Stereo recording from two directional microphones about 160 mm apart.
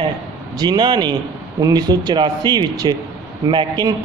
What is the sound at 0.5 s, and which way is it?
Speech, 25° right (ahead or behind).